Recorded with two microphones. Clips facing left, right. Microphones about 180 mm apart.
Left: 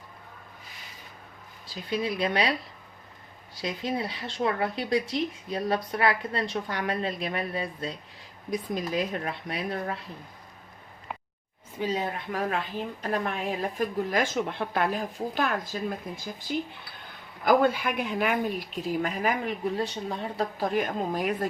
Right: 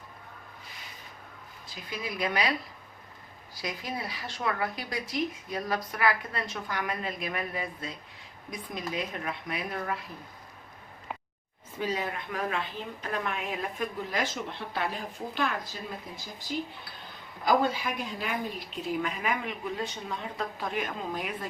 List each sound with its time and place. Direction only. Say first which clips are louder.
1.7 s speech: left 8 dB; 30° left (ahead or behind)
3.6 s a woman's voice: left 5 dB; 25° left (ahead or behind)
11.8 s a woman's voice: left 3 dB; 25° left (ahead or behind)
14.1 s a woman's voice: left 5 dB; 50° left (ahead or behind)
17.4 s speech: left 4 dB; 55° left (ahead or behind)
19.2 s a woman's voice: left 5 dB; 40° left (ahead or behind)